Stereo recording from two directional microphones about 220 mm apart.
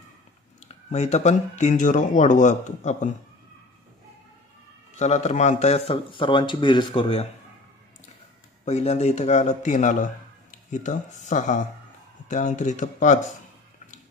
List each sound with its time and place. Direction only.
0.6 s speech: 30° left (ahead or behind)
4.9 s speech: 30° left (ahead or behind)
8.6 s speech: 30° left (ahead or behind)